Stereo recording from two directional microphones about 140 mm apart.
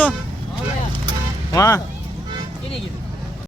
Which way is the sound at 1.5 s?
20° left (ahead or behind).